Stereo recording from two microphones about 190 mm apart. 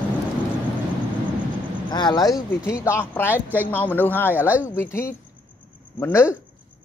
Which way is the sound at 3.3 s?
10° right (ahead or behind).